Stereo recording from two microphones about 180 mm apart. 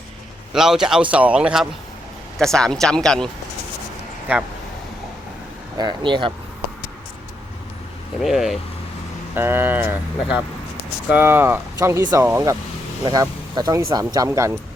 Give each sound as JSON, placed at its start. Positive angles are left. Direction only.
{"t": 0.5, "sound": "speech", "side_deg": 0}
{"t": 5.7, "sound": "speech", "side_deg": -25}
{"t": 8.2, "sound": "speech", "side_deg": 0}
{"t": 9.3, "sound": "speech", "side_deg": -10}